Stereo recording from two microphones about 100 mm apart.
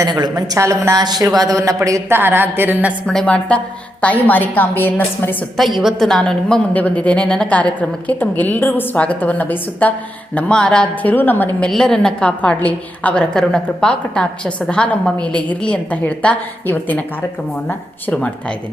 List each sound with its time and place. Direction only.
0.1 s speech: 40° right (ahead or behind); by 2.9 s 20° right (ahead or behind)
3.1 s a woman's voice: 10° left (ahead or behind)
5.5 s a woman's voice: centre (ahead or behind); by 11.7 s 20° left (ahead or behind)
11.7 s a woman's voice: 5° left (ahead or behind)